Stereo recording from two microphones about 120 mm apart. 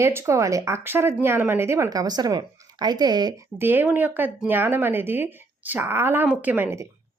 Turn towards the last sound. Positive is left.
turn(degrees=-15)  # may be behind; listen again after turning